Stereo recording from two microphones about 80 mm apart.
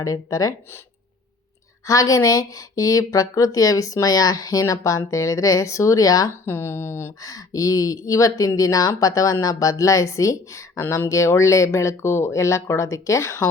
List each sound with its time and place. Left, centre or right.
0.0 s speech: left
1.9 s speech: left
6.4 s speech: left
7.2 s speech: left